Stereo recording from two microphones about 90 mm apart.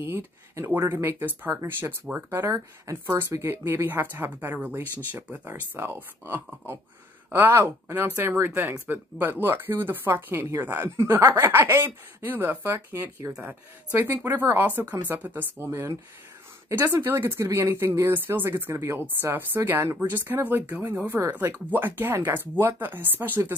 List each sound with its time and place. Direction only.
0.0 s speech: 25° right (ahead or behind)